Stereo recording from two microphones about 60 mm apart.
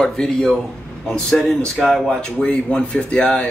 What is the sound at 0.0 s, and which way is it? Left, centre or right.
Speech, centre.